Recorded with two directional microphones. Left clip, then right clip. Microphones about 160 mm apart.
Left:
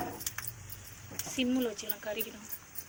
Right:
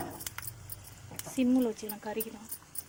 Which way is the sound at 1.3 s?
65° right (ahead or behind).